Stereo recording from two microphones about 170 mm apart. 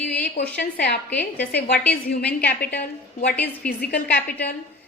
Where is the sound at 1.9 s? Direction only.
70° left (ahead or behind).